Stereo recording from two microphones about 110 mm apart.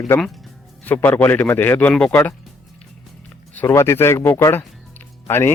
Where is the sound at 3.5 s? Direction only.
25° left (ahead or behind).